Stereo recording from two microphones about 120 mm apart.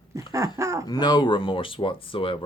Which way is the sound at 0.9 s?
35° left (ahead or behind).